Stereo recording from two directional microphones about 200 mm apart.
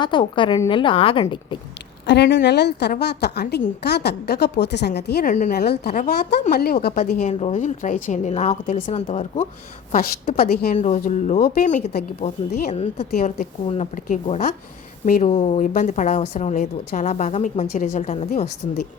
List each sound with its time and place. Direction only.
0.0 s a woman's voice: 25° left (ahead or behind)
2.0 s a woman's voice: 60° left (ahead or behind)
5.3 s a woman's voice: 40° left (ahead or behind)
9.9 s a woman's voice: 45° left (ahead or behind)
10.8 s a woman's voice: 35° left (ahead or behind)
13.1 s a woman's voice: 45° left (ahead or behind)